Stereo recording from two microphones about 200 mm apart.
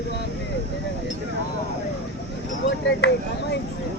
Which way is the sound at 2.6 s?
60° left (ahead or behind).